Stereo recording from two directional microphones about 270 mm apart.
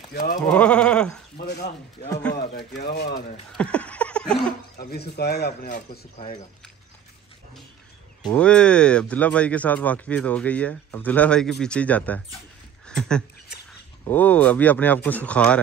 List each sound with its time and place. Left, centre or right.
0.1 s speech: left
0.4 s speech: centre
1.3 s speech: left
2.0 s speech: centre
2.3 s speech: left
3.5 s laughter: centre
4.7 s speech: left
8.3 s speech: centre
12.8 s a sound: centre
14.0 s speech: centre